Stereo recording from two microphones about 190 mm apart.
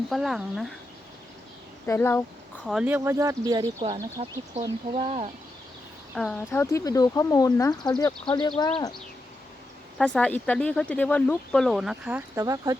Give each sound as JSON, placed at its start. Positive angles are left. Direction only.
{"t": 0.1, "sound": "speech", "side_deg": 0}
{"t": 1.9, "sound": "speech", "side_deg": 10}
{"t": 2.6, "sound": "speech", "side_deg": -5}
{"t": 4.2, "sound": "speech", "side_deg": -35}
{"t": 6.1, "sound": "speech", "side_deg": 5}
{"t": 10.0, "sound": "speech", "side_deg": 5}